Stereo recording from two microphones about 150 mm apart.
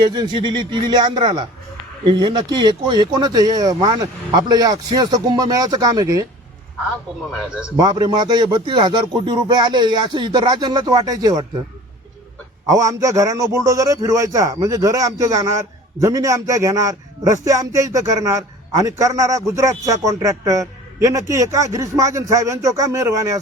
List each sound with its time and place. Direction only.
0.0 s a man's voice: 30° right (ahead or behind)
7.8 s a man's voice: 25° right (ahead or behind)
12.6 s a man's voice: 20° right (ahead or behind)